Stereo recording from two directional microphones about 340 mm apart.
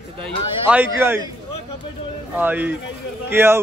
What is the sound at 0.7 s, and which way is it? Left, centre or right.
Speech, centre.